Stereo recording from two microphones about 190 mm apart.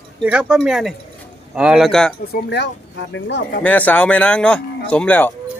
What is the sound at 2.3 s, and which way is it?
Speech, 65° left (ahead or behind).